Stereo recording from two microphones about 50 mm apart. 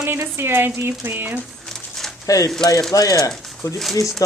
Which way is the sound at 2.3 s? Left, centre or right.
Left.